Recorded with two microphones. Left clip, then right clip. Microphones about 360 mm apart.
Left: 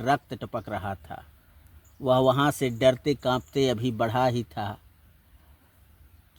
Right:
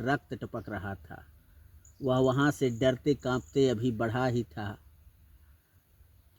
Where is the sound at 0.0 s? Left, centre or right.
Left.